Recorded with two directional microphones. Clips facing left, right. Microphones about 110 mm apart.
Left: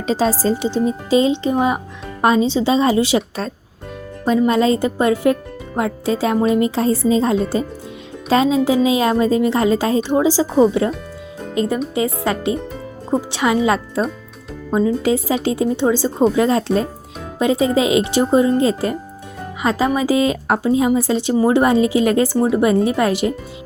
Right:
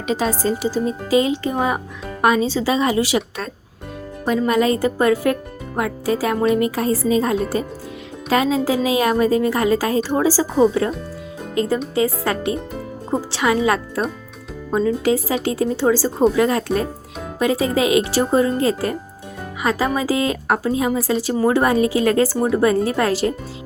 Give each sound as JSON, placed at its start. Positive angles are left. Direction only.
{"t": 0.1, "sound": "speech", "side_deg": 35}
{"t": 11.5, "sound": "speech", "side_deg": 25}
{"t": 20.0, "sound": "speech", "side_deg": 20}